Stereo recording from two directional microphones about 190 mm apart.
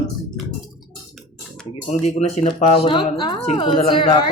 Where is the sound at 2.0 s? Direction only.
35° left (ahead or behind).